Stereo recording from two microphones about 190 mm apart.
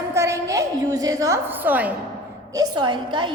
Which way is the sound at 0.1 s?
15° right (ahead or behind).